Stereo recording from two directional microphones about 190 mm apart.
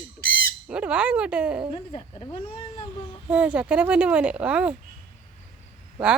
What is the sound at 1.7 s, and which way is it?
Speech, 25° left (ahead or behind).